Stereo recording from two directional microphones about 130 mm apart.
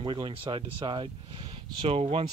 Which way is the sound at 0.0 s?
40° right (ahead or behind).